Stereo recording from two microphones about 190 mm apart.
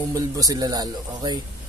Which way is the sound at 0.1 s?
20° right (ahead or behind).